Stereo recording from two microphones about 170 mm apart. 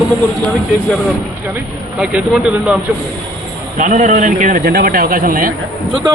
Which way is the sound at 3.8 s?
45° right (ahead or behind).